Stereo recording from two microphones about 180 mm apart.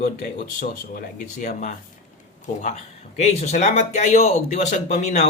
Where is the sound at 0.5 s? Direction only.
50° left (ahead or behind).